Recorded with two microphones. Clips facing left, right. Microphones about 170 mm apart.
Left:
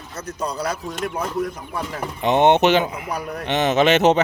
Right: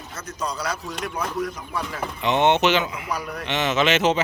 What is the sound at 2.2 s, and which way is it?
Speech, 50° left (ahead or behind).